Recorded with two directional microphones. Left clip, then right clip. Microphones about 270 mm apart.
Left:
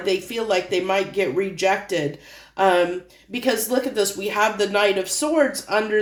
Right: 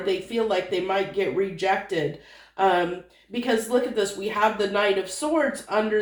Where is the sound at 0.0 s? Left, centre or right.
Left.